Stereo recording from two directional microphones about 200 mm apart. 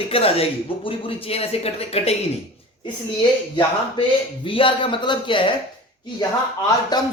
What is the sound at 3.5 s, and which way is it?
Speech, 25° left (ahead or behind).